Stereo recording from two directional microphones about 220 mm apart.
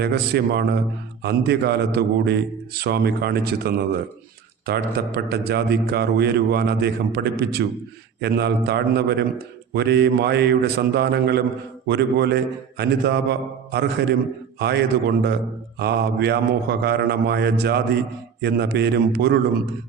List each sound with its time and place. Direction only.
0.0 s a man's voice: 50° right (ahead or behind)